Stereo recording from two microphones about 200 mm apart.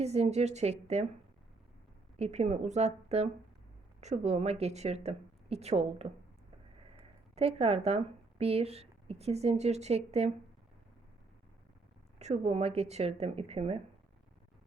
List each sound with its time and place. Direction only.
0.0 s speech: 30° right (ahead or behind)
2.1 s speech: 35° right (ahead or behind)
7.3 s speech: 30° right (ahead or behind)
12.2 s speech: 35° right (ahead or behind)